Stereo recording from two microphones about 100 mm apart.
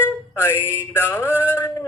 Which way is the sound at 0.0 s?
25° left (ahead or behind).